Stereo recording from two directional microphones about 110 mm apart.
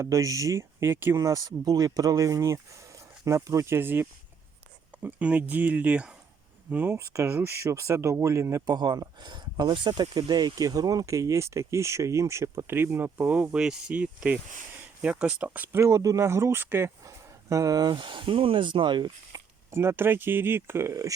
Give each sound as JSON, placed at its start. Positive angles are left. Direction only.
{"t": 0.0, "sound": "speech", "side_deg": -30}
{"t": 15.8, "sound": "speech", "side_deg": -30}
{"t": 19.7, "sound": "speech", "side_deg": -20}